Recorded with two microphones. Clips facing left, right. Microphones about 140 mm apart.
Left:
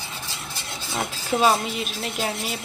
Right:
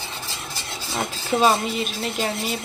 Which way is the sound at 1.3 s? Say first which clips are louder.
Right 1 dB; 5° left (ahead or behind).